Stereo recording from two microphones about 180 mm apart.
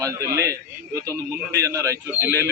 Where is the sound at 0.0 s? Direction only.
20° right (ahead or behind).